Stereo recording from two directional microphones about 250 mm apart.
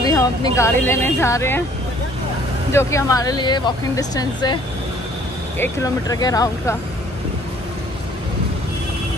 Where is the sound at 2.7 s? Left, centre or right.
Centre.